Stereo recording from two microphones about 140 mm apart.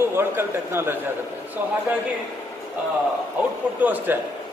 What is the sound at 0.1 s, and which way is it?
Speech, 15° right (ahead or behind).